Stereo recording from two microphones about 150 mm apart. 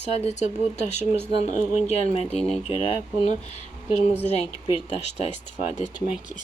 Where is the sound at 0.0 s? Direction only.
45° left (ahead or behind).